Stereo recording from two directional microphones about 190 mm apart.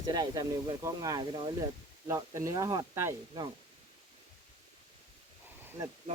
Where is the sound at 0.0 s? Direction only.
20° right (ahead or behind).